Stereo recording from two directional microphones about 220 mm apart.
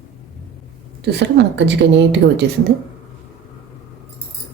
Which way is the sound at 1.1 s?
50° right (ahead or behind).